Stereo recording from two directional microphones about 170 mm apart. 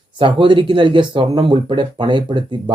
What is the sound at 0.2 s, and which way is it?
Speech, 30° right (ahead or behind).